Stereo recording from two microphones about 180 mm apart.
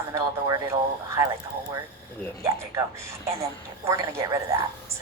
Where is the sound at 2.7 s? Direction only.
15° right (ahead or behind).